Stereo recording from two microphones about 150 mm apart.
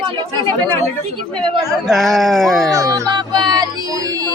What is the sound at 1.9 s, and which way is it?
Speech, centre (ahead or behind).